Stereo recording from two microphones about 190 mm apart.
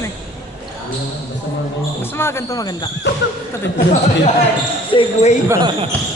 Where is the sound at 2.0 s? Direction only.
15° left (ahead or behind).